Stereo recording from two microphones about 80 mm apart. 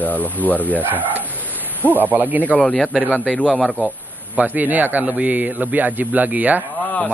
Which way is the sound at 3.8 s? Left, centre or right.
Centre.